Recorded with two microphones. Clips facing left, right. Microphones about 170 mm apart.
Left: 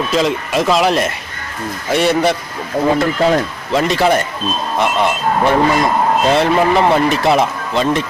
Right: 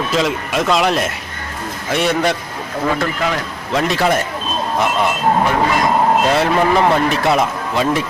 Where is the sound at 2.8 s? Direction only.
35° left (ahead or behind).